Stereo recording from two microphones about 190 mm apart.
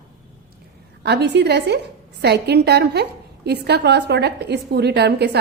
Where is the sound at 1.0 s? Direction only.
60° right (ahead or behind).